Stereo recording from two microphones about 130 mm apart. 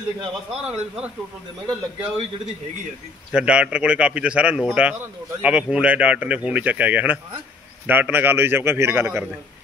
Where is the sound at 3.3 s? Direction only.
10° right (ahead or behind).